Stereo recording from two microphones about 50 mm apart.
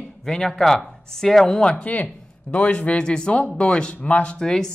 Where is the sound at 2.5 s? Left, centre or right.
Left.